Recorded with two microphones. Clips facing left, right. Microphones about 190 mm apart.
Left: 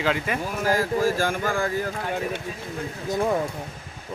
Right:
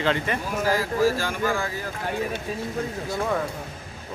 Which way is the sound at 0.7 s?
50° left (ahead or behind).